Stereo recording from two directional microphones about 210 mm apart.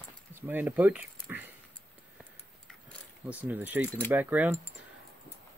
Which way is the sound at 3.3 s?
10° right (ahead or behind).